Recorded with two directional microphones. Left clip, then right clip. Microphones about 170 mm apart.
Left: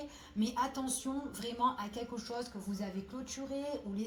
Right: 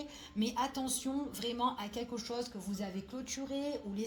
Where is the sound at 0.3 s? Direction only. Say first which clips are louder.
Even; 35° right (ahead or behind).